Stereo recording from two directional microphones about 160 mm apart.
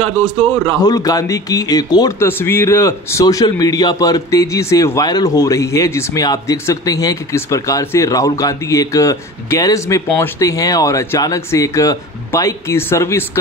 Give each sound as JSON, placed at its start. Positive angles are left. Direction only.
{"t": 0.8, "sound": "speech", "side_deg": 20}